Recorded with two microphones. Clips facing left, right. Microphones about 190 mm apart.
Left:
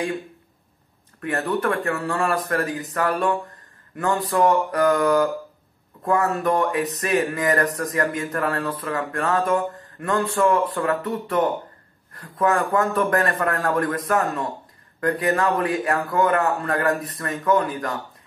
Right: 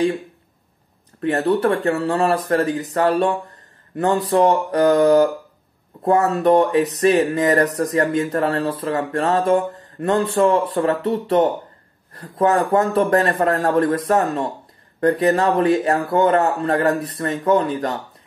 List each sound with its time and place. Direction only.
1.2 s speech: 25° right (ahead or behind)